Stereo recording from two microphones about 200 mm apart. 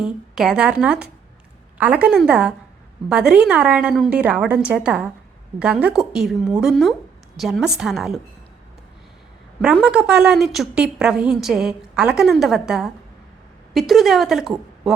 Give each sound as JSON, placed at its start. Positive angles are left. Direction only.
{"t": 0.0, "sound": "a woman's voice", "side_deg": 0}
{"t": 9.6, "sound": "a woman's voice", "side_deg": -5}